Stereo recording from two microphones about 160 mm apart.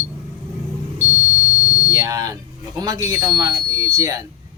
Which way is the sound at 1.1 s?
55° left (ahead or behind).